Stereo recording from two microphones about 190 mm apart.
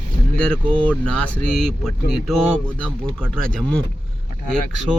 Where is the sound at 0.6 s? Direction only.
25° right (ahead or behind).